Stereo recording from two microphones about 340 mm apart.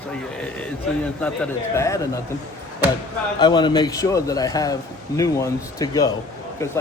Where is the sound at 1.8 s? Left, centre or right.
Centre.